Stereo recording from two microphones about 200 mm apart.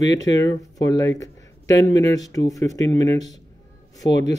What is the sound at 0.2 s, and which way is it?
Speech, 20° left (ahead or behind).